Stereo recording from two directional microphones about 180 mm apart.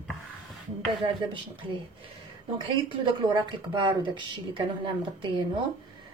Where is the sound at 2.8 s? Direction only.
25° right (ahead or behind).